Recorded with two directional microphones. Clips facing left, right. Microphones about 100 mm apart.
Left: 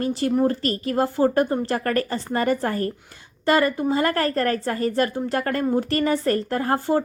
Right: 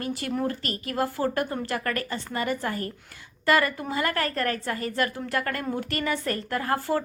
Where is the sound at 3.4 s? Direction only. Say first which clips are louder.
Left 4 dB; 30° left (ahead or behind).